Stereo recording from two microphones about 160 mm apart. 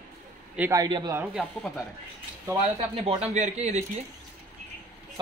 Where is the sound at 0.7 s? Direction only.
25° right (ahead or behind).